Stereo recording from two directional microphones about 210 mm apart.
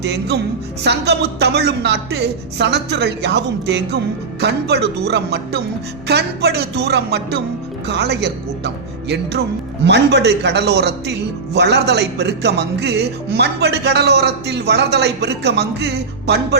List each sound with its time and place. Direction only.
0.0 s speech: 50° right (ahead or behind)